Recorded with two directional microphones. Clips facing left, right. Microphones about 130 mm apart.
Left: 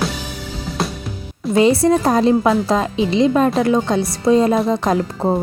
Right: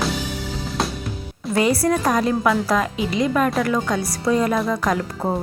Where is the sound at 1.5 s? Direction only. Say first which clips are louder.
Left 5 dB; 25° left (ahead or behind).